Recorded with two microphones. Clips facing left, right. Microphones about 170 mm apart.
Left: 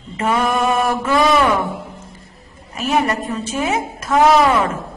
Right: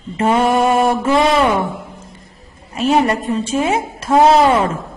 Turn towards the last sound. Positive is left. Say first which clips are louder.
# right 2 dB
turn(degrees=-30)  # may be behind; listen again after turning